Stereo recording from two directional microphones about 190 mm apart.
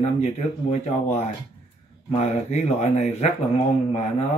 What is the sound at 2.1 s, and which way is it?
Speech, 35° left (ahead or behind).